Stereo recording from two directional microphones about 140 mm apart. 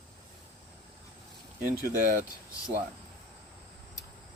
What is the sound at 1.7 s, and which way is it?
Speech, 90° right.